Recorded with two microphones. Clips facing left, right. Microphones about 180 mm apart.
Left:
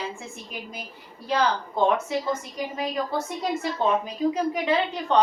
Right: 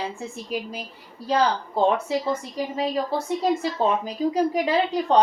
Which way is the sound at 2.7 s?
30° right (ahead or behind).